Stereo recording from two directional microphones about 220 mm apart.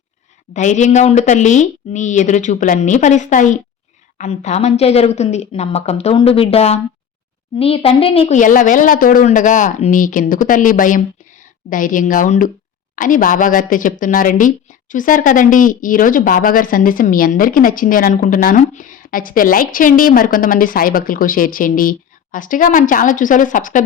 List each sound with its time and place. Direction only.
0.5 s a woman's voice: 35° left (ahead or behind)